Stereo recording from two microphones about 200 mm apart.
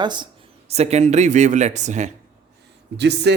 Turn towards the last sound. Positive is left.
turn(degrees=-55)  # may be behind; listen again after turning